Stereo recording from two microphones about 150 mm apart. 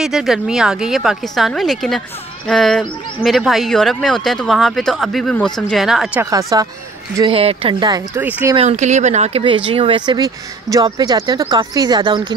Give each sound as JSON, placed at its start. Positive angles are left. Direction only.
{"t": 0.0, "sound": "speech", "side_deg": 0}
{"t": 6.3, "sound": "speech", "side_deg": -25}
{"t": 7.2, "sound": "speech", "side_deg": -35}
{"t": 8.2, "sound": "speech", "side_deg": -10}
{"t": 8.5, "sound": "speech", "side_deg": -50}
{"t": 9.7, "sound": "speech", "side_deg": -35}